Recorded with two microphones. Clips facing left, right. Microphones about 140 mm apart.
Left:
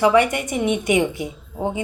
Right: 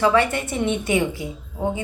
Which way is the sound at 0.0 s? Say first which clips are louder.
Left 2 dB; 15° left (ahead or behind).